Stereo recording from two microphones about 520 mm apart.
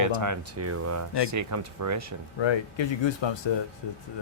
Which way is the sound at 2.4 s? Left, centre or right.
Left.